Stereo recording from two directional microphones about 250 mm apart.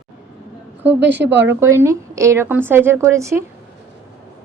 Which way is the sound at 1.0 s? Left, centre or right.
Right.